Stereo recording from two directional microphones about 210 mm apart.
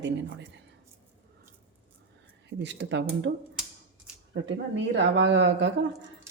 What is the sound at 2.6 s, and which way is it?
A woman's voice, 55° right (ahead or behind).